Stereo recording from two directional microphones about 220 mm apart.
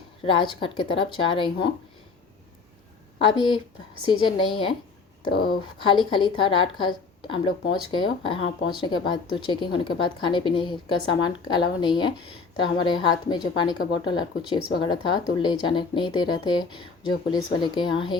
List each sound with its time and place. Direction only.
0.3 s a woman's voice: 20° left (ahead or behind)
3.3 s a woman's voice: 20° left (ahead or behind)
5.3 s speech: 45° left (ahead or behind)
5.8 s a woman's voice: 20° left (ahead or behind)